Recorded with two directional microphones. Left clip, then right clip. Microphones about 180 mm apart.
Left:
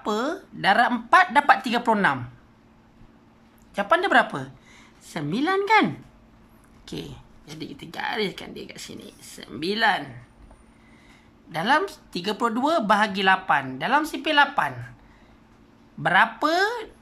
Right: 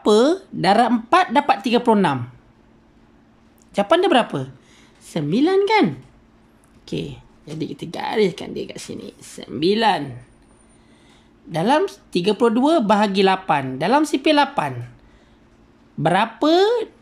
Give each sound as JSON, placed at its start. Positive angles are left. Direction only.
{"t": 0.0, "sound": "speech", "side_deg": -25}
{"t": 3.7, "sound": "speech", "side_deg": -15}
{"t": 6.9, "sound": "speech", "side_deg": -10}
{"t": 11.5, "sound": "speech", "side_deg": -20}
{"t": 16.0, "sound": "speech", "side_deg": -20}